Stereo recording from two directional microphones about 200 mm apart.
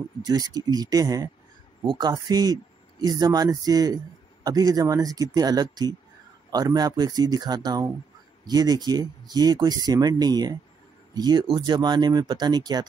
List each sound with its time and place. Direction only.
0.2 s speech: 20° right (ahead or behind)